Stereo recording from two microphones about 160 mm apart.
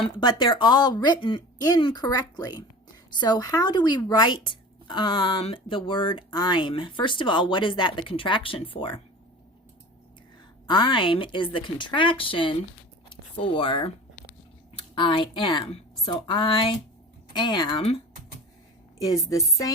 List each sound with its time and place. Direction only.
0.2 s speech: 30° left (ahead or behind)
10.7 s speech: 30° left (ahead or behind)
18.9 s speech: 20° left (ahead or behind)